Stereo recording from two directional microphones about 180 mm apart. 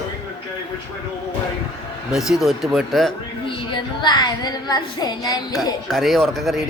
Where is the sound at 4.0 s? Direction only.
25° left (ahead or behind).